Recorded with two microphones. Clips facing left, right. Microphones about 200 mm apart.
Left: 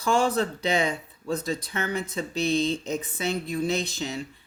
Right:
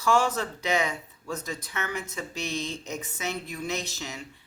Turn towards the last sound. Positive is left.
turn(degrees=30)  # may be behind; listen again after turning